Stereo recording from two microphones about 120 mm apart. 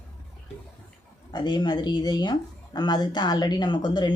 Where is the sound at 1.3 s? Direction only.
35° left (ahead or behind).